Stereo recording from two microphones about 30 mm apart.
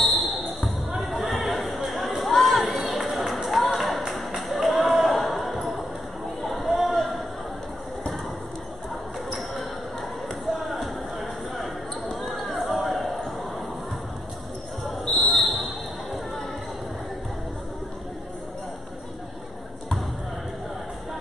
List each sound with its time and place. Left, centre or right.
0.0 s basketball bounce: centre
1.0 s chatter: centre
1.9 s a sound: centre
2.6 s run: centre
3.4 s music: centre
4.1 s a sound: centre
6.4 s chatter: centre
9.3 s a sound: centre
10.5 s basketball bounce: centre
15.0 s basketball bounce: centre